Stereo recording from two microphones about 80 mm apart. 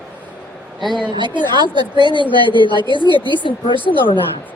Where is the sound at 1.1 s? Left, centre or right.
Right.